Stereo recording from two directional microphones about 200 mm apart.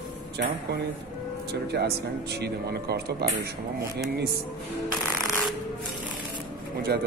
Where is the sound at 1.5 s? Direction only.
55° right (ahead or behind).